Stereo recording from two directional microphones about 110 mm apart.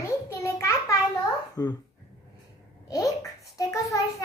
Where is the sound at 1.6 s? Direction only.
35° left (ahead or behind).